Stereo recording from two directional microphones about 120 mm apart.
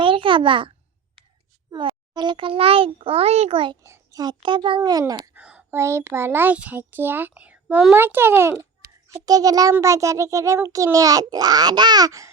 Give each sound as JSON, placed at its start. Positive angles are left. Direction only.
{"t": 0.0, "sound": "a sound", "side_deg": -45}
{"t": 1.7, "sound": "a child's voice", "side_deg": -40}
{"t": 3.8, "sound": "a child's voice", "side_deg": -25}
{"t": 4.4, "sound": "a child's voice", "side_deg": -40}
{"t": 4.8, "sound": "speech", "side_deg": -30}
{"t": 5.3, "sound": "a sound", "side_deg": -10}
{"t": 5.7, "sound": "a child's voice", "side_deg": -25}
{"t": 9.2, "sound": "a child's voice", "side_deg": -30}